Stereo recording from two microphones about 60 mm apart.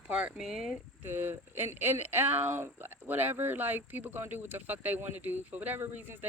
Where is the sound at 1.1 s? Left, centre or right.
Right.